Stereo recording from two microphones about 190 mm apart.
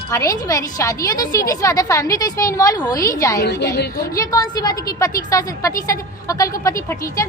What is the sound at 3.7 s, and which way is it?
Speech, 50° left (ahead or behind).